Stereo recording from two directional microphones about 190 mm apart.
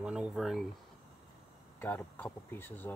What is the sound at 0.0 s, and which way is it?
Speech, 5° right (ahead or behind).